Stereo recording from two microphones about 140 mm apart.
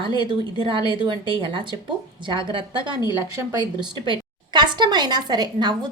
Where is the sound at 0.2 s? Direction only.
35° right (ahead or behind).